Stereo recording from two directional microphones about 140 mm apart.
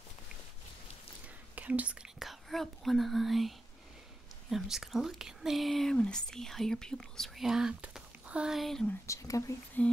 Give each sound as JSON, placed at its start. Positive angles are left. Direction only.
{"t": 1.5, "sound": "speech", "side_deg": -10}
{"t": 9.0, "sound": "speech", "side_deg": 20}
{"t": 9.8, "sound": "a sound", "side_deg": 10}